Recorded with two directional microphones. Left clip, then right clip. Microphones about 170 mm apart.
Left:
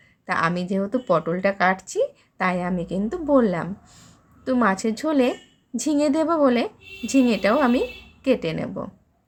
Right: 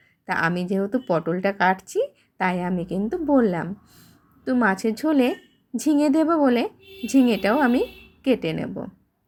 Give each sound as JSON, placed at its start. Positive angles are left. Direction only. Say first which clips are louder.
{"t": 0.3, "sound": "speech", "louder": "left 1 dB", "side_deg": -10}